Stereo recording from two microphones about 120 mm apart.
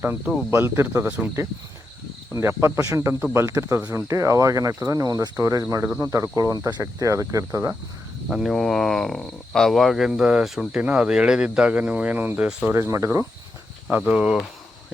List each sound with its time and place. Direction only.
0.5 s speech: 20° right (ahead or behind)
8.3 s speech: 5° right (ahead or behind)
12.7 s speech: 25° right (ahead or behind)
14.1 s speech: 5° right (ahead or behind)